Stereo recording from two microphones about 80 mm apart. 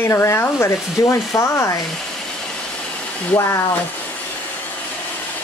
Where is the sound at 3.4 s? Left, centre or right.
Left.